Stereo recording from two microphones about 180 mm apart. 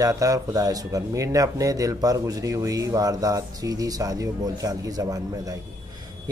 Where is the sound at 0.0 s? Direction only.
20° right (ahead or behind).